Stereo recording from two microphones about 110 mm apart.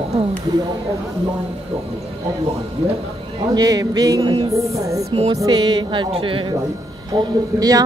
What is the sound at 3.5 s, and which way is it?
A woman's voice, 35° right (ahead or behind).